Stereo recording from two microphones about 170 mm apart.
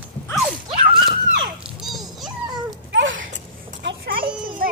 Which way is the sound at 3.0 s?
90° right.